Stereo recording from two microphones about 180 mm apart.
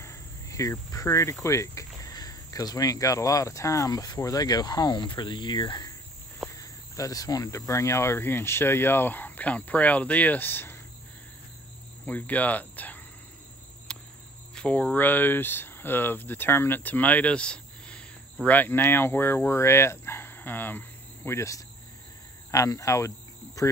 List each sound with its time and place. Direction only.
0.0 s cricket: 15° left (ahead or behind)
1.4 s speech: 15° left (ahead or behind)
12.1 s speech: 10° left (ahead or behind)
13.9 s cricket: 5° left (ahead or behind)
14.5 s speech: 5° left (ahead or behind)
22.5 s cricket: 15° left (ahead or behind)